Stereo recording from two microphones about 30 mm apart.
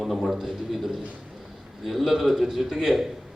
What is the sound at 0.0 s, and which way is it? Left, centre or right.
Speech, centre.